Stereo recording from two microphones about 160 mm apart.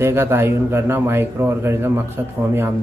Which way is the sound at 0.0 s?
15° right (ahead or behind).